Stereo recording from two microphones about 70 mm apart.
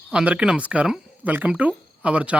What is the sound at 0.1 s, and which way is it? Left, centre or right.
Speech, centre.